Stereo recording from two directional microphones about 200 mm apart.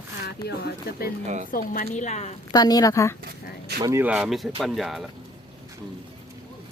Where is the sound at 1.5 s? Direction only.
45° left (ahead or behind).